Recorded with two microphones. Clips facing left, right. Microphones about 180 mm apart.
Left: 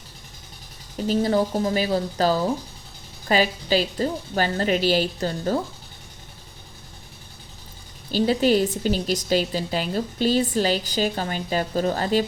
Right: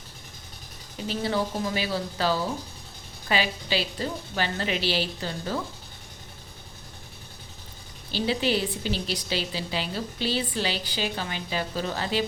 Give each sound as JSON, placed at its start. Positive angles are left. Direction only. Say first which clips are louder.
{"t": 1.0, "sound": "a woman's voice", "louder": "left 7 dB", "side_deg": 40}
{"t": 8.1, "sound": "a woman's voice", "louder": "left 6 dB", "side_deg": 45}